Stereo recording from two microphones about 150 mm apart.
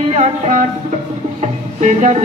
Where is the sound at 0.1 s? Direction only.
50° right (ahead or behind).